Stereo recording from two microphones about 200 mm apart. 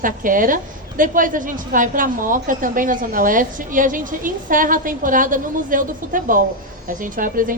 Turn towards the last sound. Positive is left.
turn(degrees=-40)  # may be behind; listen again after turning